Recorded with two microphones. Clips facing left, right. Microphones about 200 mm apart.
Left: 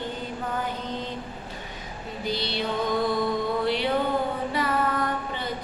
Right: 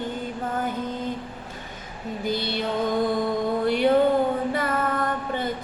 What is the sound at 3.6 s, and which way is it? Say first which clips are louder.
Music: right 4 dB; 50° right (ahead or behind).